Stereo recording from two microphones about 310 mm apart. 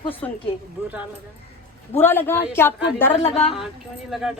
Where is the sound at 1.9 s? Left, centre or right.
Centre.